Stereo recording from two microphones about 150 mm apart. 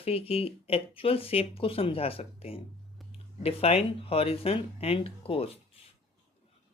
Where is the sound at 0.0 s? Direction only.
40° left (ahead or behind).